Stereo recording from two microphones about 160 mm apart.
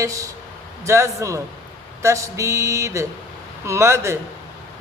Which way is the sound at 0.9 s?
20° right (ahead or behind).